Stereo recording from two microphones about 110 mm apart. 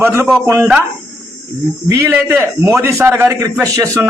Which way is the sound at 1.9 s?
25° right (ahead or behind).